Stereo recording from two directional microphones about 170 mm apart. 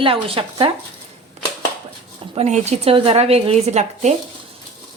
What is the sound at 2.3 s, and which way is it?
Speech, 40° right (ahead or behind).